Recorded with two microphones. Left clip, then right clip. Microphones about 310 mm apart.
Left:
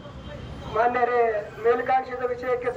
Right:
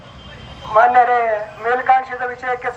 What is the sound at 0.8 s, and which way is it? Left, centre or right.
A man's voice, centre.